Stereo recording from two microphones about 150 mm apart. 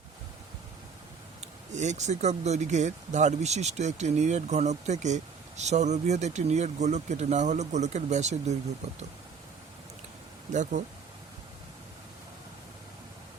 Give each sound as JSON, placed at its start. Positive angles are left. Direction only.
{"t": 1.7, "sound": "speech", "side_deg": -50}
{"t": 10.5, "sound": "speech", "side_deg": -55}